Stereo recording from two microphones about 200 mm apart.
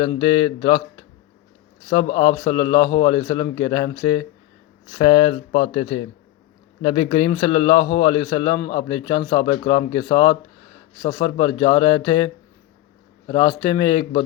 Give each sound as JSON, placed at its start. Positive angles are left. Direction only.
{"t": 0.0, "sound": "a man's voice", "side_deg": 25}
{"t": 1.9, "sound": "a man's voice", "side_deg": 30}
{"t": 4.9, "sound": "a man's voice", "side_deg": 35}